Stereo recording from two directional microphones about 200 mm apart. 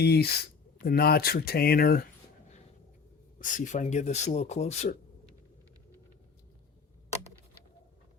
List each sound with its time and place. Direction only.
0.0 s speech: 55° left (ahead or behind)
3.3 s speech: 40° left (ahead or behind)